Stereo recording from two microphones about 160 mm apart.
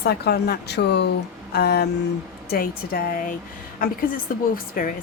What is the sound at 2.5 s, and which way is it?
Speech, 70° left (ahead or behind).